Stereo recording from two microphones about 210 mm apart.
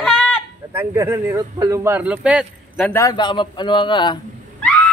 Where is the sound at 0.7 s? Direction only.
15° right (ahead or behind).